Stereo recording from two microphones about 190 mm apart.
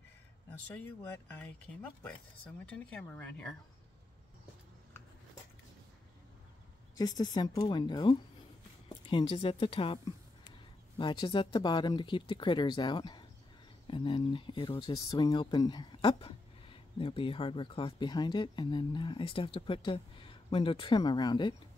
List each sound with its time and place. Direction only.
0.7 s speech: 10° left (ahead or behind)
7.0 s speech: 20° left (ahead or behind)
11.0 s speech: 25° left (ahead or behind)